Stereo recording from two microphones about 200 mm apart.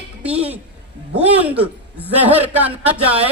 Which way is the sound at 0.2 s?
5° right (ahead or behind).